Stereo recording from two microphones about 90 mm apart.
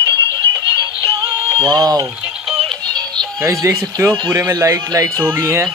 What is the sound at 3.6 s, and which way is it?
Speech, 35° right (ahead or behind).